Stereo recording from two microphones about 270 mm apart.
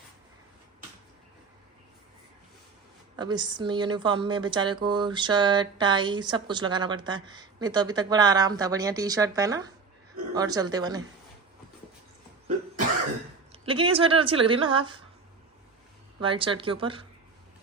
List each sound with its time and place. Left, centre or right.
3.2 s speech: centre
13.5 s speech: centre
16.2 s speech: centre